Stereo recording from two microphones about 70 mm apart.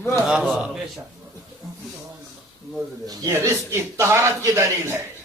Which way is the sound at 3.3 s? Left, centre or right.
Right.